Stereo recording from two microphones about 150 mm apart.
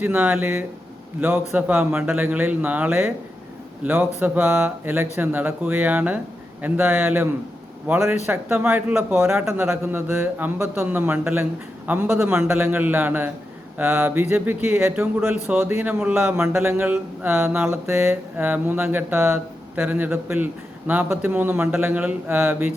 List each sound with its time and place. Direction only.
0.0 s speech: 10° right (ahead or behind)